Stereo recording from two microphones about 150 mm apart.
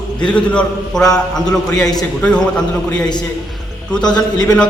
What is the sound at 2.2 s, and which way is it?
Speech, 5° left (ahead or behind).